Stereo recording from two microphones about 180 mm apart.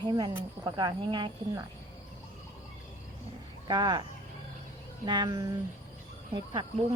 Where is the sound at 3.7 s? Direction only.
25° right (ahead or behind).